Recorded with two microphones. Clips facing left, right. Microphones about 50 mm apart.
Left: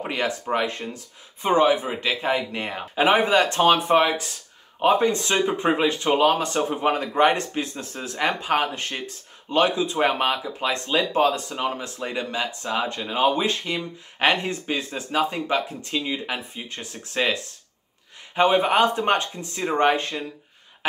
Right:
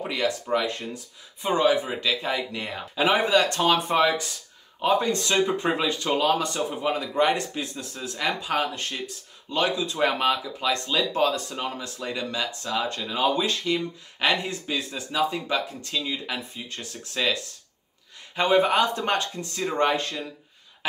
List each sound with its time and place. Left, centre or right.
0.0 s speech: left